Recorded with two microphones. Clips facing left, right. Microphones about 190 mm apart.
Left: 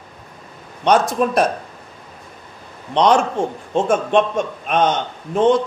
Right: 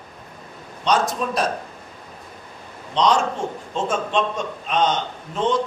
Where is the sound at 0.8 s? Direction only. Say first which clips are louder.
Left 5 dB; 55° left (ahead or behind).